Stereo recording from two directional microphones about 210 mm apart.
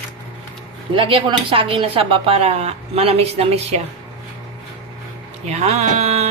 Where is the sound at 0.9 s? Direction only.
25° right (ahead or behind).